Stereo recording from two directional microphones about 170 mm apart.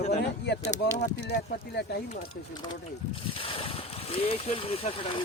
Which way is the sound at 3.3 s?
30° left (ahead or behind).